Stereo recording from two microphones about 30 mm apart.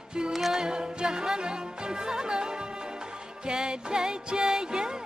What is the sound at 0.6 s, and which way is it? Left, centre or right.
Music, right.